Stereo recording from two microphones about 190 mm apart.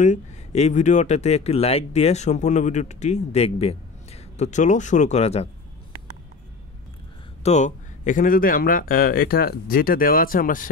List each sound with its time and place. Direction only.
0.0 s speech: 40° left (ahead or behind)
7.4 s speech: 40° left (ahead or behind)